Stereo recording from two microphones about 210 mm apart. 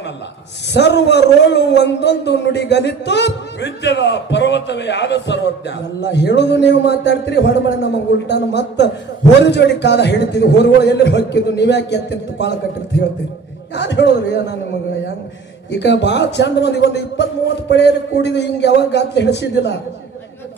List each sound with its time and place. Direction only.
0.7 s a man's voice: 55° left (ahead or behind)
13.7 s a man's voice: 55° left (ahead or behind)
15.7 s a man's voice: 55° left (ahead or behind)